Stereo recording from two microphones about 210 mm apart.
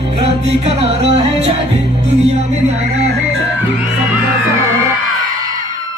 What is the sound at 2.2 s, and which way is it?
Music, 30° right (ahead or behind).